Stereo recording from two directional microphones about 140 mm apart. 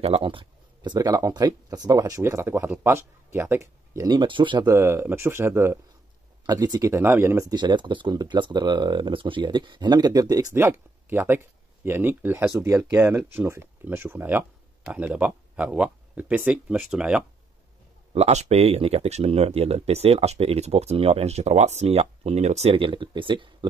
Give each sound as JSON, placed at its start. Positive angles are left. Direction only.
{"t": 0.0, "sound": "speech", "side_deg": -40}
{"t": 4.1, "sound": "speech", "side_deg": -35}
{"t": 4.6, "sound": "speech", "side_deg": -20}
{"t": 6.4, "sound": "speech", "side_deg": -25}
{"t": 7.5, "sound": "speech", "side_deg": -35}
{"t": 18.1, "sound": "speech", "side_deg": -50}